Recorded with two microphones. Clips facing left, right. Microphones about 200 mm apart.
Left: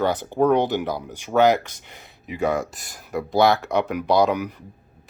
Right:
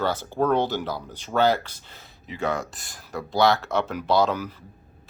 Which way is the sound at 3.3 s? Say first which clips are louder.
Left 3 dB; 20° left (ahead or behind).